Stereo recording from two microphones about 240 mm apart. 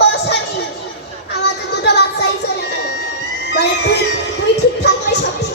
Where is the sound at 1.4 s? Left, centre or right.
Left.